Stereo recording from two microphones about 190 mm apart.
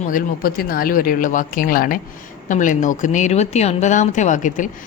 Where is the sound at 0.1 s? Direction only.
50° left (ahead or behind).